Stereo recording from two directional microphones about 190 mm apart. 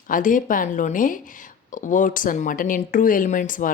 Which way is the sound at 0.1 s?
45° left (ahead or behind).